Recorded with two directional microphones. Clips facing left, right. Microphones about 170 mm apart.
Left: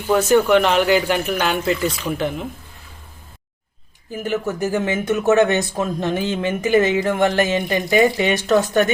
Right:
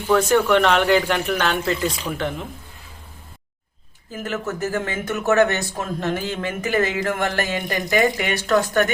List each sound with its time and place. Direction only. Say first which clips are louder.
0.1 s speech: left 2 dB; 10° left (ahead or behind)
4.1 s speech: left 4 dB; 15° left (ahead or behind)